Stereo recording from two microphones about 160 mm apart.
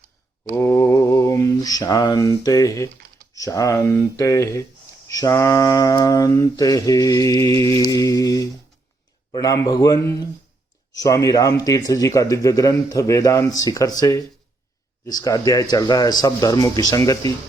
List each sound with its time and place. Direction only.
0.5 s mantra: 15° left (ahead or behind)